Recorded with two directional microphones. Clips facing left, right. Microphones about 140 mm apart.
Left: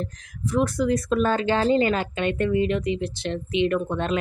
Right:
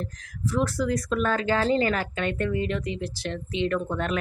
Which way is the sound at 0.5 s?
20° left (ahead or behind).